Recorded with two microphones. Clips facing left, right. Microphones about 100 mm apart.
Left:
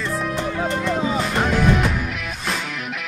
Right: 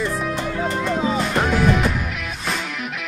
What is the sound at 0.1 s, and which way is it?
Music, centre (ahead or behind).